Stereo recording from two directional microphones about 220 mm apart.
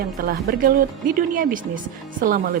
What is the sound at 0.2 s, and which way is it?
A woman's voice, 40° right (ahead or behind).